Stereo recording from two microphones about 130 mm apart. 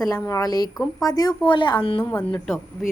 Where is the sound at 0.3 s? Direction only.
25° left (ahead or behind).